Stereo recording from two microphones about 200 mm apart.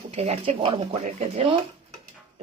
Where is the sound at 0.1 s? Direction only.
30° right (ahead or behind).